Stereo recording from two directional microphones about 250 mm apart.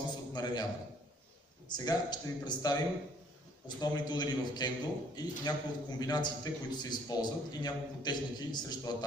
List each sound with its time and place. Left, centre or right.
0.3 s a man's voice: centre
1.7 s a man's voice: centre